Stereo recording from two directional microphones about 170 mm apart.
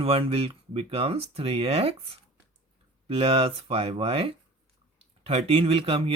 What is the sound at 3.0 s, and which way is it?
Speech, 35° right (ahead or behind).